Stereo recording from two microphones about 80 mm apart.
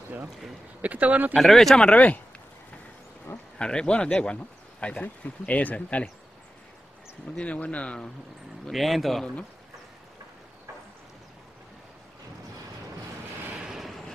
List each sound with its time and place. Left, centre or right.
0.8 s speech: centre
1.3 s speech: centre
3.5 s speech: centre
7.3 s speech: centre
8.6 s speech: centre
13.7 s vehicle: centre